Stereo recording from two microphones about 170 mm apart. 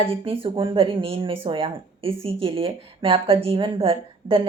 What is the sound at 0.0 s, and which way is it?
Speech, 35° right (ahead or behind).